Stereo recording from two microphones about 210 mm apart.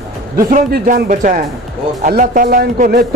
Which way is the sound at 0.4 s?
40° right (ahead or behind).